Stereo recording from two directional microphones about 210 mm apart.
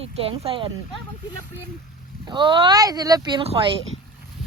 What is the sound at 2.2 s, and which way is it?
Speech, 20° right (ahead or behind).